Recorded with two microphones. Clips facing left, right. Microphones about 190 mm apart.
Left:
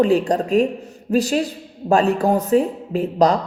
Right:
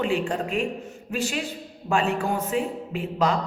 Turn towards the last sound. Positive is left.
turn(degrees=40)  # may be behind; listen again after turning